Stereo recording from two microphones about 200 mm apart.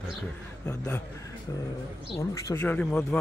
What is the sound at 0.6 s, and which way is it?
Speech, 15° left (ahead or behind).